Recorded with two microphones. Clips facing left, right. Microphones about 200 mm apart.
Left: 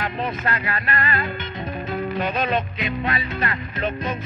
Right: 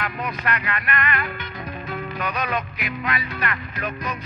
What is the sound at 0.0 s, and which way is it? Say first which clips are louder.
Music: left 2 dB; 25° left (ahead or behind).